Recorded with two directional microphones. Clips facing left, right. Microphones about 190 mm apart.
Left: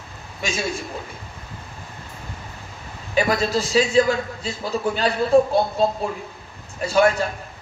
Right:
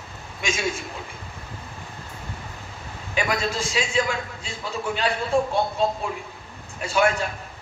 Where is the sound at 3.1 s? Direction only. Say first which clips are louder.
Left 5 dB; 35° left (ahead or behind).